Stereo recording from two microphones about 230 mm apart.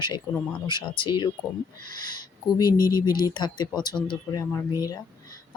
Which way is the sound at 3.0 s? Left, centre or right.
Centre.